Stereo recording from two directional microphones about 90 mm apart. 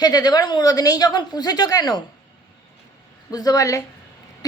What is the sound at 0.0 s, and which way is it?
A woman's voice, 50° left (ahead or behind).